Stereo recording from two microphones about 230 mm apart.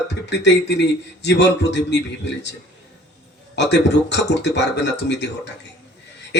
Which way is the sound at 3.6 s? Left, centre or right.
Left.